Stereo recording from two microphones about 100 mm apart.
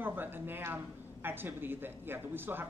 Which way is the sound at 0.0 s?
20° right (ahead or behind).